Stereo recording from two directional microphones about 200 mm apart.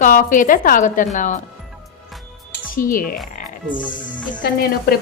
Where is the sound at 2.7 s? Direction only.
45° left (ahead or behind).